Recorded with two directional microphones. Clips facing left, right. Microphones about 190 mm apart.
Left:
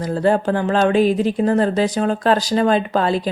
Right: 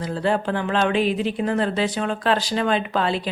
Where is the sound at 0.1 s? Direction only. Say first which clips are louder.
Left 6 dB; 45° left (ahead or behind).